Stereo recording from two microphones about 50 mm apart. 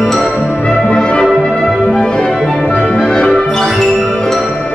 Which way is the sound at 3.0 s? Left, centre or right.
Centre.